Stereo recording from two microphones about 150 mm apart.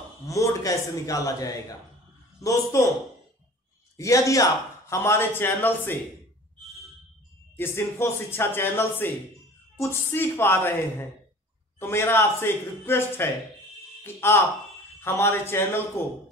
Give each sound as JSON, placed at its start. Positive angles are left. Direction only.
{"t": 0.3, "sound": "a man's voice", "side_deg": 20}
{"t": 3.9, "sound": "speech", "side_deg": 20}
{"t": 7.5, "sound": "speech", "side_deg": 15}